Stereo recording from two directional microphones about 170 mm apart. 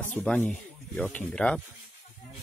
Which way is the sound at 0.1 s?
10° left (ahead or behind).